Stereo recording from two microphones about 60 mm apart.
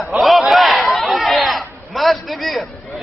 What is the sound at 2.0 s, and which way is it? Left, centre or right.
Speech, centre.